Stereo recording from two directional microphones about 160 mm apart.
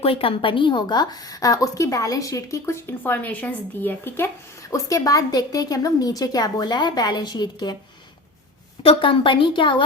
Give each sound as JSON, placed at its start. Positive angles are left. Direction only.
{"t": 0.0, "sound": "a woman's voice", "side_deg": 35}
{"t": 8.8, "sound": "a woman's voice", "side_deg": 35}